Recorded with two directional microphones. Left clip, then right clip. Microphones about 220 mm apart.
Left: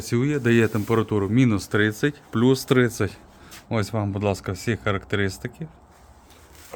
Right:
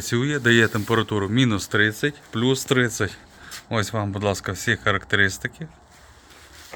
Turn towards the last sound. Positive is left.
turn(degrees=10)  # may be behind; listen again after turning